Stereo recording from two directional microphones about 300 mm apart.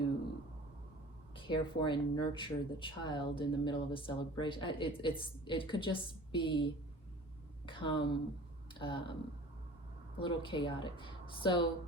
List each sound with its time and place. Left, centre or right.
1.5 s speech: centre
7.7 s speech: centre
10.2 s speech: centre